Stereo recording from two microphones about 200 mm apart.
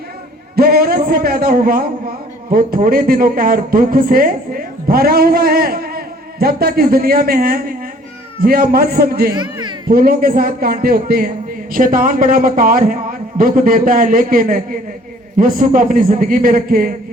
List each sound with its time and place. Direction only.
0.5 s a man's voice: 50° right (ahead or behind)
9.3 s speech: 20° right (ahead or behind)
9.9 s a man's voice: 45° right (ahead or behind)